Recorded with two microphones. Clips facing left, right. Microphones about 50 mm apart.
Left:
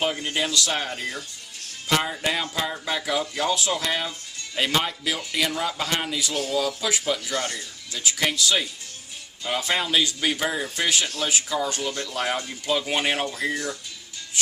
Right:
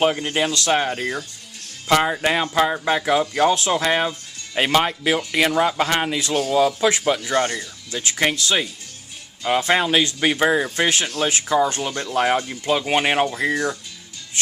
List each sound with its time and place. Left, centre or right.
0.0 s speech: right
13.5 s speech: right